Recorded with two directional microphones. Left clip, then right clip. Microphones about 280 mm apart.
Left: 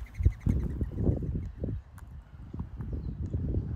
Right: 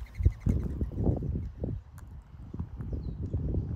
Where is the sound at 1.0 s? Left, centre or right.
Centre.